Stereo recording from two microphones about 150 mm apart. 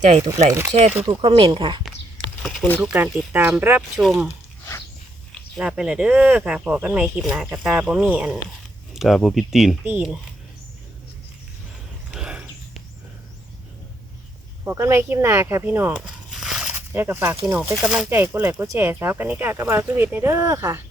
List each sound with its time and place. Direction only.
0.0 s speech: 50° right (ahead or behind)
1.2 s speech: 35° right (ahead or behind)
2.4 s a sound: centre (ahead or behind)
2.8 s speech: 10° right (ahead or behind)
5.5 s speech: 5° right (ahead or behind)
12.1 s a sound: 5° right (ahead or behind)
14.6 s speech: 15° right (ahead or behind)
16.7 s speech: 15° right (ahead or behind)
18.1 s speech: 15° right (ahead or behind)